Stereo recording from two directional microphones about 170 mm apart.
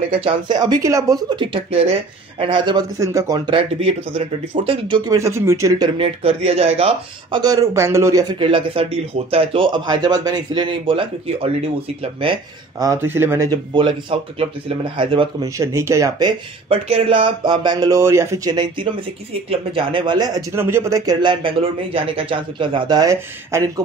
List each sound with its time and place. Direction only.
0.2 s speech: 25° right (ahead or behind)
5.9 s speech: 35° right (ahead or behind)
15.5 s speech: 15° right (ahead or behind)